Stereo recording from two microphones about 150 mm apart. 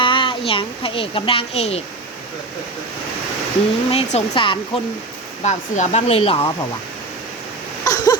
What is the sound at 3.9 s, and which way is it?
Speech, 40° left (ahead or behind).